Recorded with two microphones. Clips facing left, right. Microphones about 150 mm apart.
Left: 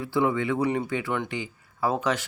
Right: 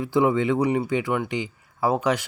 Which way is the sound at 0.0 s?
20° right (ahead or behind).